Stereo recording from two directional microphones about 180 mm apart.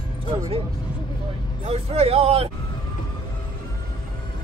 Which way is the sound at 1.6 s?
35° right (ahead or behind).